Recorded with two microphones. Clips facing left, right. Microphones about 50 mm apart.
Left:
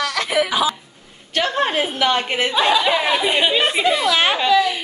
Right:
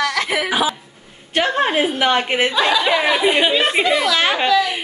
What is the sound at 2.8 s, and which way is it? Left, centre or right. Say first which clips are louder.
Speech: right 2 dB; centre.